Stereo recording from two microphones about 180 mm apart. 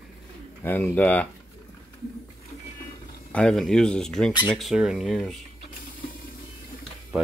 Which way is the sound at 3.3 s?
5° left (ahead or behind).